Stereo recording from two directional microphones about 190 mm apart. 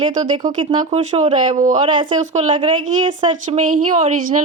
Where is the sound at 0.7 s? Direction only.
35° right (ahead or behind).